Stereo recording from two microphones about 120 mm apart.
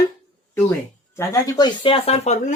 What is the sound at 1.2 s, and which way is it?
Speech, 30° left (ahead or behind).